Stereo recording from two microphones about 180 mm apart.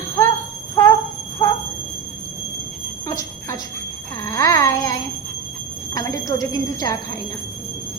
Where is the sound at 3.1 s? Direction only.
20° left (ahead or behind).